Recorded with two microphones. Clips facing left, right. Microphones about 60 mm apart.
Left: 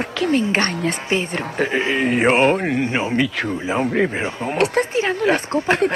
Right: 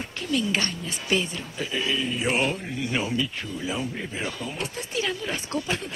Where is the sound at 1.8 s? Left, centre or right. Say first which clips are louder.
Left 5 dB; left.